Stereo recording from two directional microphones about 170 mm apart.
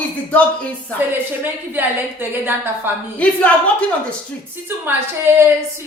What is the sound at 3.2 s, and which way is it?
Speech, 10° left (ahead or behind).